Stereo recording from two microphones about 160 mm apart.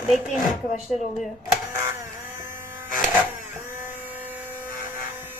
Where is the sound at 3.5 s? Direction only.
15° right (ahead or behind).